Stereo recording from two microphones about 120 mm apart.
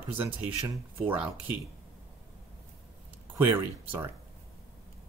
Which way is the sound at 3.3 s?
20° right (ahead or behind).